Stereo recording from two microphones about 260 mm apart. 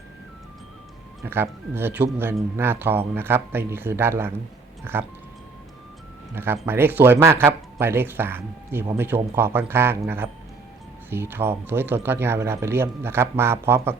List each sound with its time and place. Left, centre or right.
1.2 s speech: centre
6.3 s speech: centre